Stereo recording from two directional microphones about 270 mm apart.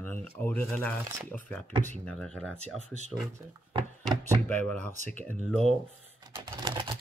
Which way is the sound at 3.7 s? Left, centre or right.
Centre.